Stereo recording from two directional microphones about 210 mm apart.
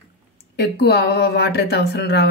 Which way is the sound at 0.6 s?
50° left (ahead or behind).